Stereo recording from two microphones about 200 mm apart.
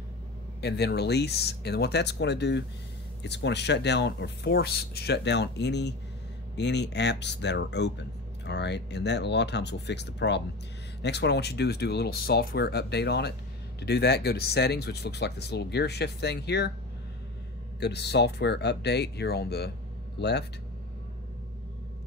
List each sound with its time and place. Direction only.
0.6 s speech: 55° left (ahead or behind)
17.7 s speech: 55° left (ahead or behind)